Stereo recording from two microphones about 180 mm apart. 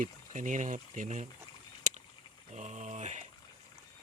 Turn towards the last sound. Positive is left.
turn(degrees=-40)  # may be behind; listen again after turning